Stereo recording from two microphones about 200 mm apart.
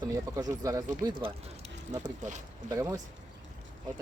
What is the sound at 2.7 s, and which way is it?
Speech, 15° right (ahead or behind).